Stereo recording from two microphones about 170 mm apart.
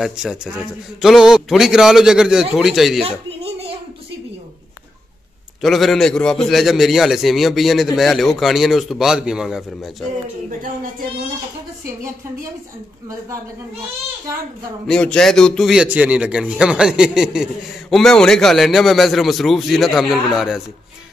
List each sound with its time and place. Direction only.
0.0 s a man's voice: 5° right (ahead or behind)
3.0 s a sound: 35° right (ahead or behind)
5.6 s a man's voice: centre (ahead or behind)
14.9 s a man's voice: 5° left (ahead or behind)